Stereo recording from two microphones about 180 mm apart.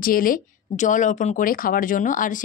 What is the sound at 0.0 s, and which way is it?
Speech, 50° left (ahead or behind).